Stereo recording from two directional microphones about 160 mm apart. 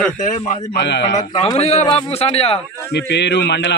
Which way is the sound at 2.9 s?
90° left.